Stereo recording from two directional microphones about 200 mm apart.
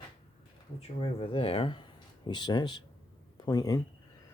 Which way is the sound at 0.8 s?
30° left (ahead or behind).